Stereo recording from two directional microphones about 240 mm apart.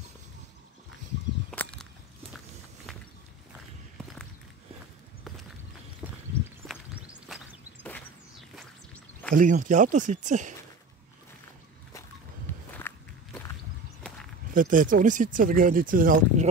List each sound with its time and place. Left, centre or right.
1.5 s a sound: centre
6.6 s walk: centre
7.2 s a sound: centre
9.3 s speech: right
12.7 s walk: centre
14.5 s speech: right